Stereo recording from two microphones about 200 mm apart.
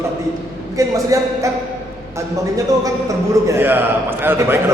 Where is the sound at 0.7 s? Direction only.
15° right (ahead or behind).